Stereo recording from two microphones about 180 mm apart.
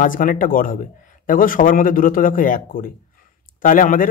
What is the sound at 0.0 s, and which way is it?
A man's voice, 50° left (ahead or behind).